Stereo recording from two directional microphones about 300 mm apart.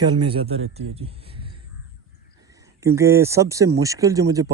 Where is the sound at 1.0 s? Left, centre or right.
Centre.